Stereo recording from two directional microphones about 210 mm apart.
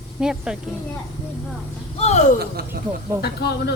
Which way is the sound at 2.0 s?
35° left (ahead or behind).